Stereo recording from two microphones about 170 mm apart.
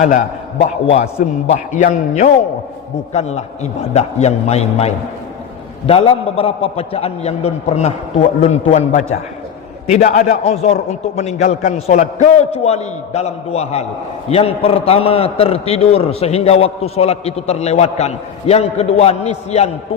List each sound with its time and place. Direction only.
0.0 s a man's voice: 45° left (ahead or behind)